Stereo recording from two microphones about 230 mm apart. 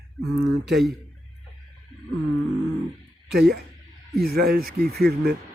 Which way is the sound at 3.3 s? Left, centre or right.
Right.